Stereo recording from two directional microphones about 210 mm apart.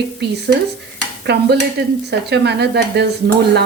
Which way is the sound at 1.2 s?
55° right (ahead or behind).